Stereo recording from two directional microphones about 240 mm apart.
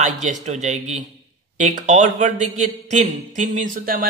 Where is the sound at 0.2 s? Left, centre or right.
Right.